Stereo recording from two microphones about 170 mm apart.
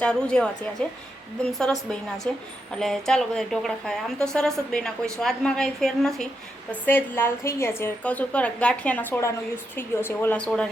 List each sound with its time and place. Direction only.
0.0 s a woman's voice: 5° left (ahead or behind)